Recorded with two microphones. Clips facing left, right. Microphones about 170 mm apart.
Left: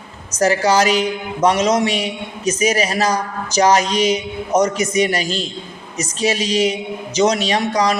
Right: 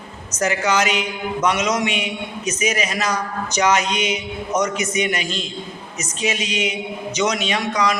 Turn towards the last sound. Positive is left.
turn(degrees=35)  # may be behind; listen again after turning